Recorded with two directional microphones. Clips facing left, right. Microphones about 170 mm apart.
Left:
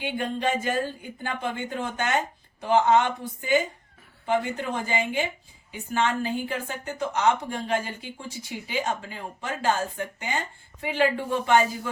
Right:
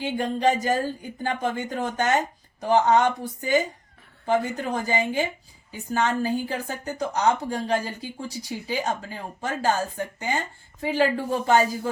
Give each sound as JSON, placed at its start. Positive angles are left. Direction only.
{"t": 0.1, "sound": "speech", "side_deg": -40}